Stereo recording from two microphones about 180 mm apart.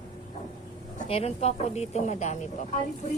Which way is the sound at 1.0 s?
35° left (ahead or behind).